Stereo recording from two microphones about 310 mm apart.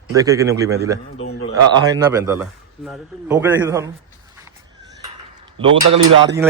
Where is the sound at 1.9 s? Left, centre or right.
Centre.